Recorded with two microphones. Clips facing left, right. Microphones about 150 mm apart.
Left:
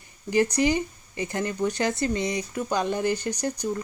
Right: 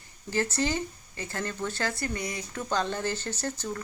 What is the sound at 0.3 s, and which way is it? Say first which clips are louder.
Speech: left 6 dB; 15° left (ahead or behind).